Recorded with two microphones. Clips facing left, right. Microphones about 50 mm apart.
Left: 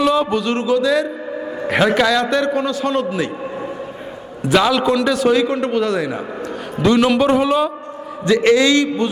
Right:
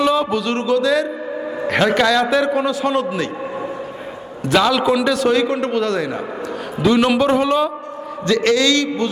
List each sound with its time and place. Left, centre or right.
0.0 s a man's voice: centre
4.4 s a man's voice: centre
8.3 s a man's voice: centre